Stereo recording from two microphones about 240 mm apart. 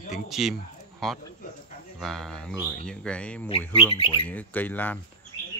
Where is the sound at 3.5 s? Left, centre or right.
Left.